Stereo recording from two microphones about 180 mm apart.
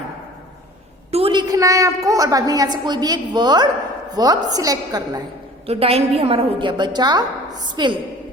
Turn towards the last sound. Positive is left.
turn(degrees=-25)  # may be behind; listen again after turning